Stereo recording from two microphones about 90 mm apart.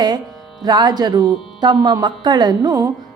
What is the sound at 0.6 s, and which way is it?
Speech, 50° right (ahead or behind).